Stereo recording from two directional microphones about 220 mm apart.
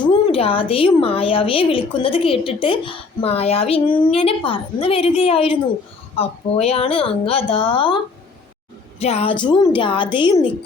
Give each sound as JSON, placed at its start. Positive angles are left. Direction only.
{"t": 0.1, "sound": "a woman's voice", "side_deg": 25}